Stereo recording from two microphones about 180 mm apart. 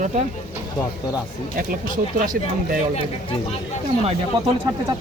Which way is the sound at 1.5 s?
50° right (ahead or behind).